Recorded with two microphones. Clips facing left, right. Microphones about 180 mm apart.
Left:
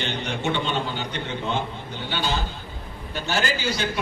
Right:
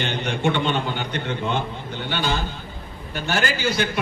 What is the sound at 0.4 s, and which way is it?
Speech, 55° right (ahead or behind).